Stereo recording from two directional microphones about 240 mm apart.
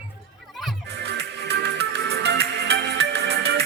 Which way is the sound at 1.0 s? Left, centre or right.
Right.